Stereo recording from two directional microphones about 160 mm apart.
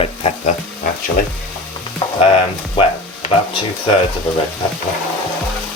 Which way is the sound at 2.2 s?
40° left (ahead or behind).